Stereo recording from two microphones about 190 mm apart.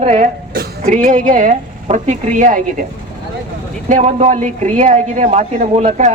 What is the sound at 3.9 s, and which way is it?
A woman's voice, 35° right (ahead or behind).